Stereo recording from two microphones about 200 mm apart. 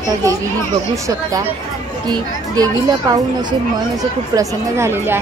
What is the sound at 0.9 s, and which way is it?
Speech, 15° right (ahead or behind).